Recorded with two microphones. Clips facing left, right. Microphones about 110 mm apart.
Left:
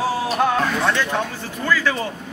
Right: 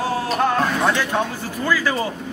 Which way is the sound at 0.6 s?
10° right (ahead or behind).